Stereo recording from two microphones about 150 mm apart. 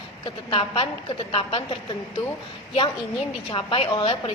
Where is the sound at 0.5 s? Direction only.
35° left (ahead or behind).